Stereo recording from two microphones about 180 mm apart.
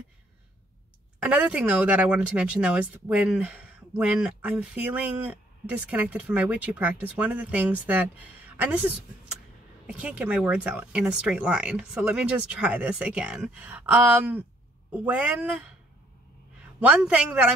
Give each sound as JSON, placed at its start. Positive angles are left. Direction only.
{"t": 1.2, "sound": "speech", "side_deg": -10}
{"t": 16.8, "sound": "speech", "side_deg": -10}